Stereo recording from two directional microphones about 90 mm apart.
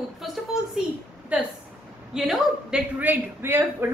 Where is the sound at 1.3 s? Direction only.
15° right (ahead or behind).